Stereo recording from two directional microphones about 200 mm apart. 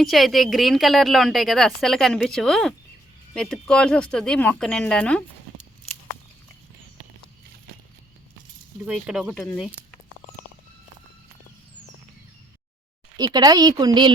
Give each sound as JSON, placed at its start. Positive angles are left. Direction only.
{"t": 0.0, "sound": "speech", "side_deg": 0}
{"t": 8.9, "sound": "speech", "side_deg": -5}
{"t": 13.1, "sound": "a woman's voice", "side_deg": -20}